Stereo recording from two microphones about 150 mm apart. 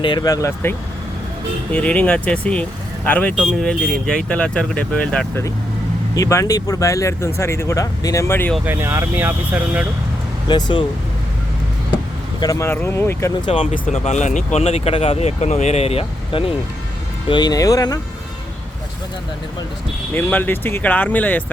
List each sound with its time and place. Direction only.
0.0 s speech: 30° left (ahead or behind); by 5.3 s 10° left (ahead or behind)
6.1 s speech: 20° left (ahead or behind)
8.6 s speech: 15° right (ahead or behind)
10.5 s speech: 35° left (ahead or behind)
12.4 s speech: 20° left (ahead or behind)
13.4 s speech: 40° left (ahead or behind)
13.9 s speech: 50° left (ahead or behind)
17.2 s speech: 30° left (ahead or behind)
20.1 s speech: 10° left (ahead or behind)